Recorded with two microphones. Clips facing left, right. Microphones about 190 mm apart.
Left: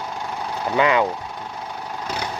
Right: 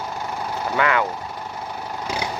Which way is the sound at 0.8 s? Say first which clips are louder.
Left 3 dB; 20° left (ahead or behind).